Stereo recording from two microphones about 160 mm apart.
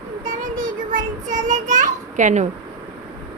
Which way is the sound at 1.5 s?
50° right (ahead or behind).